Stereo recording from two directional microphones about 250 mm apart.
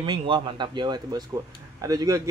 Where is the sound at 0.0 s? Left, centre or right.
Centre.